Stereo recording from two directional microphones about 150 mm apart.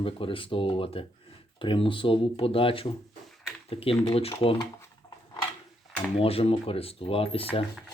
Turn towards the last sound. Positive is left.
turn(degrees=40)  # may be behind; listen again after turning